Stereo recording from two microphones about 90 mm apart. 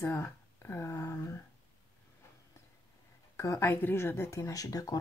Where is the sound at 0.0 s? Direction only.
25° left (ahead or behind).